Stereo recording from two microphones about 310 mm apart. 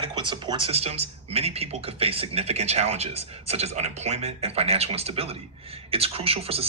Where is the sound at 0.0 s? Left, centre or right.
Centre.